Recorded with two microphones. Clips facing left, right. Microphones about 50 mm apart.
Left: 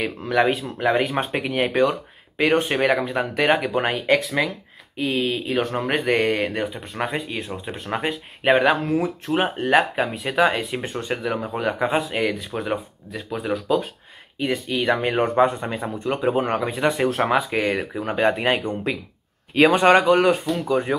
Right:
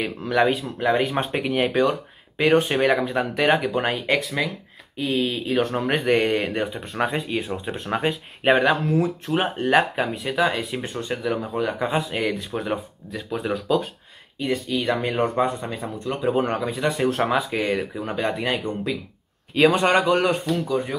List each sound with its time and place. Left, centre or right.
0.0 s speech: centre
8.6 s speech: centre
14.4 s speech: left
16.3 s speech: centre
20.2 s speech: centre